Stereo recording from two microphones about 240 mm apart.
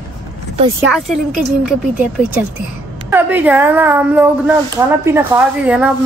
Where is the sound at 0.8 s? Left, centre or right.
Centre.